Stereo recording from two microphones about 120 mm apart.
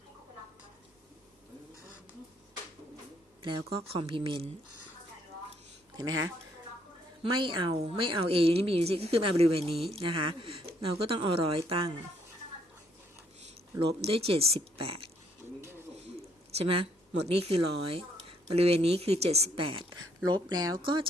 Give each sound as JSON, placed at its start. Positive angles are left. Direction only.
{"t": 3.4, "sound": "speech", "side_deg": -45}
{"t": 6.0, "sound": "speech", "side_deg": -30}
{"t": 7.2, "sound": "speech", "side_deg": -45}
{"t": 13.7, "sound": "speech", "side_deg": -50}
{"t": 16.6, "sound": "speech", "side_deg": -50}
{"t": 20.2, "sound": "speech", "side_deg": -35}